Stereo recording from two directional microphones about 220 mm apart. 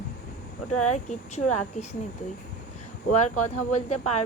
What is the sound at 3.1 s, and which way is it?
Speech, 30° left (ahead or behind).